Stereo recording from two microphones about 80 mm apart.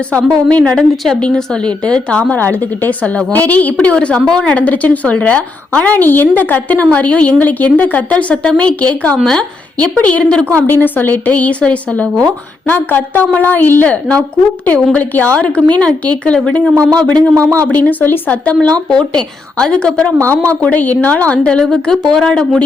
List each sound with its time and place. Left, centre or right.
0.1 s a woman's voice: centre
16.7 s speech: right
17.6 s a woman's voice: left